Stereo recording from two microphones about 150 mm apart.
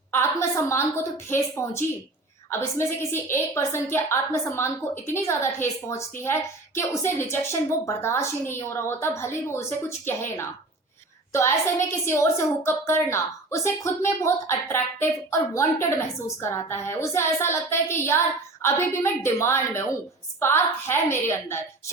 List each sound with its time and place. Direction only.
0.1 s a woman's voice: 15° left (ahead or behind)
11.3 s a woman's voice: 20° left (ahead or behind)